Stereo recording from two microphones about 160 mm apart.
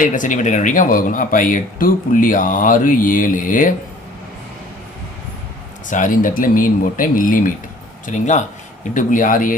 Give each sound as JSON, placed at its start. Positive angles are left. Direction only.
{"t": 0.0, "sound": "speech", "side_deg": 55}
{"t": 5.9, "sound": "speech", "side_deg": 55}